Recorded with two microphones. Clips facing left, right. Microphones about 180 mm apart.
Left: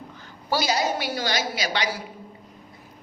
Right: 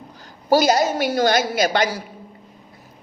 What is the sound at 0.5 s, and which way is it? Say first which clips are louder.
A woman's voice: right 8 dB; 45° right (ahead or behind).